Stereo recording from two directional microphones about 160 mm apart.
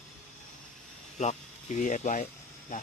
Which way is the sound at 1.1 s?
50° left (ahead or behind).